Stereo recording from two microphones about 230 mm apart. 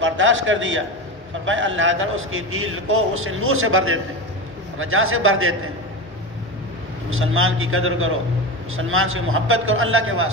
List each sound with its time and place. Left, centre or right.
0.0 s a man's voice: right
7.1 s a man's voice: right